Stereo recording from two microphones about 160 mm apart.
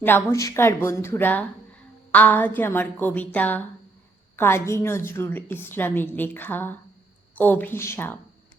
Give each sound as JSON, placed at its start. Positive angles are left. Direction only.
{"t": 0.0, "sound": "a woman's voice", "side_deg": 15}